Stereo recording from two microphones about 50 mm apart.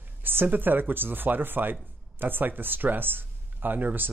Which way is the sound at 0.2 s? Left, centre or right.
Right.